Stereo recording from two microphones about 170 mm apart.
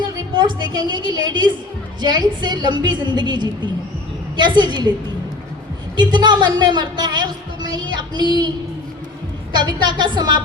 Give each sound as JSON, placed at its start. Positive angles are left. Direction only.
{"t": 0.3, "sound": "a woman's voice", "side_deg": -25}
{"t": 6.0, "sound": "a woman's voice", "side_deg": -25}